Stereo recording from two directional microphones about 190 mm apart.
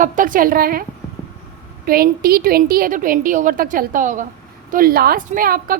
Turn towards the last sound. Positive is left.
turn(degrees=-50)  # may be behind; listen again after turning